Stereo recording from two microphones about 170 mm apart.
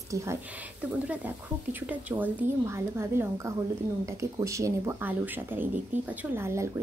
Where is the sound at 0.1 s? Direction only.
20° right (ahead or behind).